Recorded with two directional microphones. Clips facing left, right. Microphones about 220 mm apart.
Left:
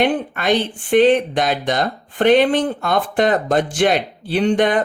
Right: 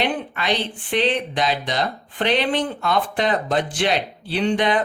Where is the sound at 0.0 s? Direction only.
50° left (ahead or behind).